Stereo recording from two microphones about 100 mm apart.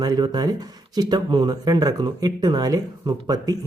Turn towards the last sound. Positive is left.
turn(degrees=-40)  # may be behind; listen again after turning